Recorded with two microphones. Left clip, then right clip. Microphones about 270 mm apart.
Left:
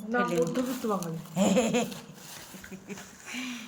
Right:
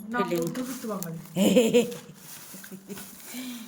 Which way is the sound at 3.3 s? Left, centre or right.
Centre.